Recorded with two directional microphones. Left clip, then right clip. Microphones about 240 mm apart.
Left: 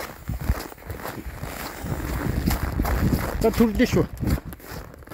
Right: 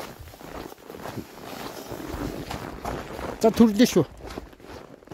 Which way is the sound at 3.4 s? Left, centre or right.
Right.